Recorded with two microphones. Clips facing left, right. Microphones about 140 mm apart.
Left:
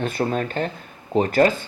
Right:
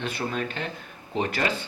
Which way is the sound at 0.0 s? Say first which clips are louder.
Left 6 dB; 45° left (ahead or behind).